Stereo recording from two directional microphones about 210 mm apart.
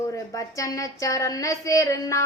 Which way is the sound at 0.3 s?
15° left (ahead or behind).